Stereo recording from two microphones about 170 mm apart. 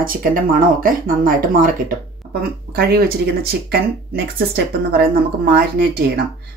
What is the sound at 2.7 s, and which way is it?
Speech, 65° right (ahead or behind).